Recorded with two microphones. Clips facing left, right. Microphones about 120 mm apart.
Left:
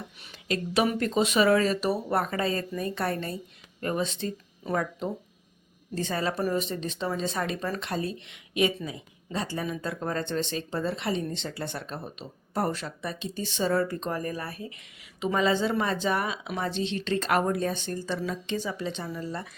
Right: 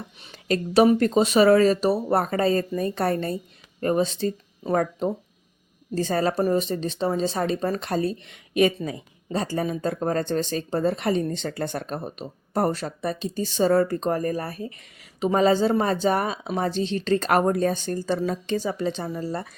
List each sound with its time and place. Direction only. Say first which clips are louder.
0.2 s speech: right 6 dB; 35° right (ahead or behind)